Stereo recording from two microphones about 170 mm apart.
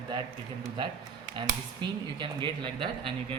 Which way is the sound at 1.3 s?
25° right (ahead or behind).